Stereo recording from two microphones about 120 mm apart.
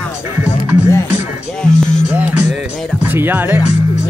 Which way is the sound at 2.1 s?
15° right (ahead or behind).